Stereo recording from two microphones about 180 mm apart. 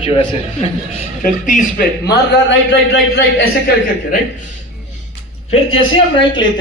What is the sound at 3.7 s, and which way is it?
Speech, 60° left (ahead or behind).